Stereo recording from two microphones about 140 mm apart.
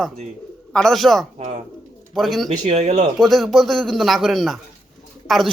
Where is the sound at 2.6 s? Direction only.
55° right (ahead or behind).